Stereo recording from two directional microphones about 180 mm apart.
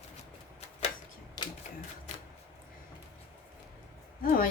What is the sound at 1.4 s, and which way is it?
Typewriter, 25° left (ahead or behind).